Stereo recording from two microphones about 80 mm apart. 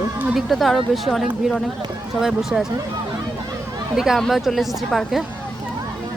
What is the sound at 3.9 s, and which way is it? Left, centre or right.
A woman's voice, centre.